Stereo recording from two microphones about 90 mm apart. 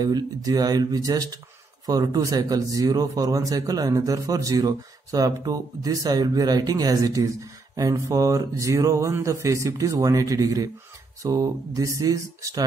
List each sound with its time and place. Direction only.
0.0 s a man's voice: 45° right (ahead or behind)